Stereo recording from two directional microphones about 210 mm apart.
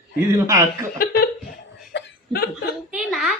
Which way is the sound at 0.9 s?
45° left (ahead or behind).